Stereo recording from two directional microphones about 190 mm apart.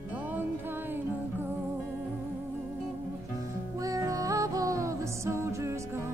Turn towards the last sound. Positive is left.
turn(degrees=-15)  # may be behind; listen again after turning